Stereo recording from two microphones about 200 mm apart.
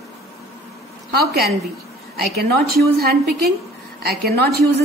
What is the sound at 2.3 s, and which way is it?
A woman's voice, 50° right (ahead or behind).